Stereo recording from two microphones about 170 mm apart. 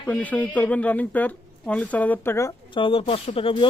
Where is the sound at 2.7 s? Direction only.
30° left (ahead or behind).